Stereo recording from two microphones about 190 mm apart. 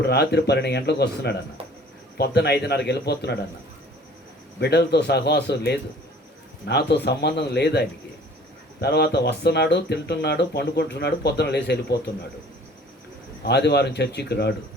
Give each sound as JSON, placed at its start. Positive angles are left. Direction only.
{"t": 0.0, "sound": "speech", "side_deg": 60}
{"t": 4.6, "sound": "speech", "side_deg": 60}
{"t": 13.4, "sound": "speech", "side_deg": 60}